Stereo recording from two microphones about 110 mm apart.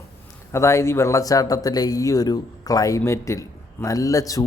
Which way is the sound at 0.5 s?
25° left (ahead or behind).